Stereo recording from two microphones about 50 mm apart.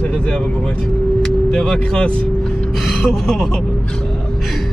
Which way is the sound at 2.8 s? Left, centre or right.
Centre.